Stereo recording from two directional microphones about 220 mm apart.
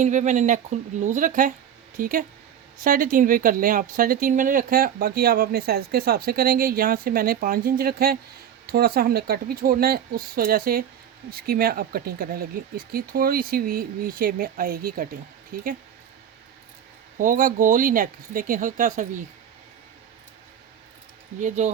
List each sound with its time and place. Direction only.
0.0 s speech: 35° right (ahead or behind)
17.2 s speech: 40° right (ahead or behind)
21.4 s speech: 35° right (ahead or behind)